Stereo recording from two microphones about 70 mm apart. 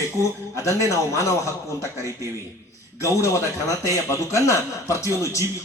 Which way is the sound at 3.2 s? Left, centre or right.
Left.